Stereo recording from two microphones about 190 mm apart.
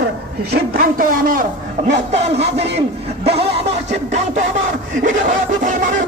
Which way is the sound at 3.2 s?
30° right (ahead or behind).